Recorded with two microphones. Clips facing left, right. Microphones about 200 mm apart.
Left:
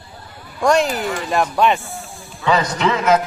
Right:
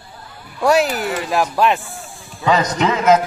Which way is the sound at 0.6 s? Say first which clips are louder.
Right 1 dB; 5° right (ahead or behind).